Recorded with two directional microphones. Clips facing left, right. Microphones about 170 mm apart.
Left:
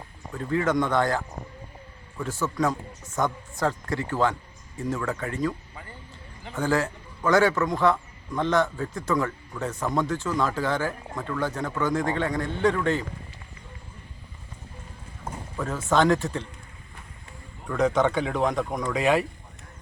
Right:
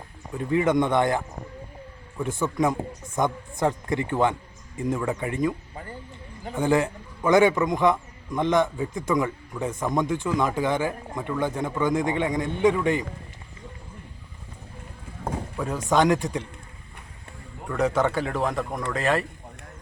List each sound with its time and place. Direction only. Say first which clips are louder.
0.3 s speech: right 3 dB; 15° right (ahead or behind)
2.4 s a man's voice: right 2 dB; 15° right (ahead or behind)
15.5 s a man's voice: even; 10° right (ahead or behind)
17.7 s speech: left 1 dB; 5° right (ahead or behind)